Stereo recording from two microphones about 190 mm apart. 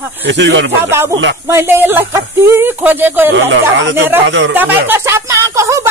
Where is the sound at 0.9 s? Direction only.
15° right (ahead or behind).